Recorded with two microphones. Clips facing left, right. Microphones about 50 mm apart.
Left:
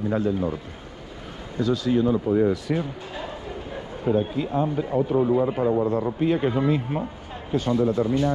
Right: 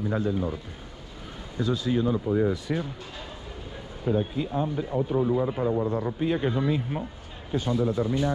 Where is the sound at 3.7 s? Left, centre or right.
Left.